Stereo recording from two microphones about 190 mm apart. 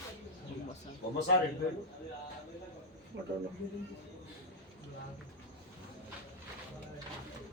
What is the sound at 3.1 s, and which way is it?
Speech, 70° right (ahead or behind).